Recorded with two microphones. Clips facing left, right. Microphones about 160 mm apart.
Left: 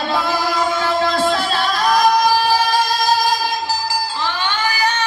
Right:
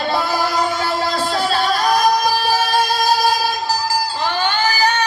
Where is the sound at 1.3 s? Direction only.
40° right (ahead or behind).